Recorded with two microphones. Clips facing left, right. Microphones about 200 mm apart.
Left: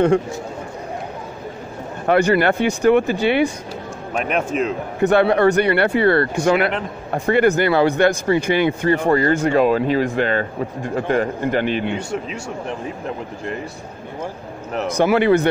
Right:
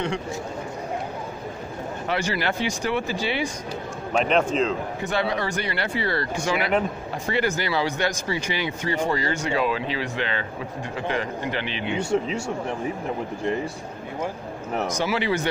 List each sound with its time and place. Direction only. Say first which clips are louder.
2.0 s speech: left 11 dB; 55° left (ahead or behind)
4.2 s a man's voice: left 1 dB; 10° left (ahead or behind)
5.0 s a man's voice: left 13 dB; 60° left (ahead or behind)
12.0 s a man's voice: right 3 dB; 10° left (ahead or behind)
15.0 s speech: left 12 dB; 55° left (ahead or behind)